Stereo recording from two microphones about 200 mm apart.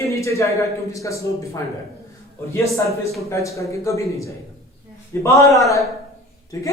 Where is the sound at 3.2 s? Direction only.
15° left (ahead or behind).